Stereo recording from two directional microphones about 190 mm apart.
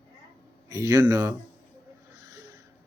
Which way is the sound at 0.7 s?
15° right (ahead or behind).